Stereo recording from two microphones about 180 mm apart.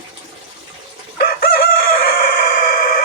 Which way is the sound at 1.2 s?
55° left (ahead or behind).